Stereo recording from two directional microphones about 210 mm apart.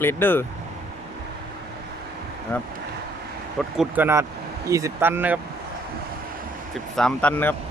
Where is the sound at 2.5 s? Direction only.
10° left (ahead or behind).